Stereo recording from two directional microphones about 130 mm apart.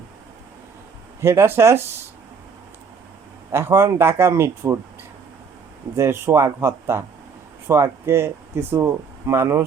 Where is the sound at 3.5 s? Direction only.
20° right (ahead or behind).